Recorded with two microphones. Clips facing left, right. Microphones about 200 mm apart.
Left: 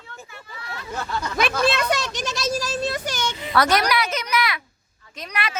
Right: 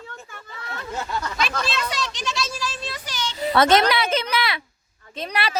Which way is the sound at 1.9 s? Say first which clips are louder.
Left 4 dB; 45° left (ahead or behind).